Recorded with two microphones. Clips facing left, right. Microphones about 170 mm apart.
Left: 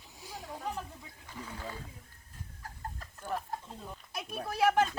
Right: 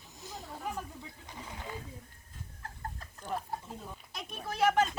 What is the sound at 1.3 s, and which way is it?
Speech, 15° right (ahead or behind).